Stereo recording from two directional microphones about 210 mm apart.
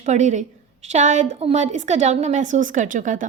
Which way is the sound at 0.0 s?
35° right (ahead or behind).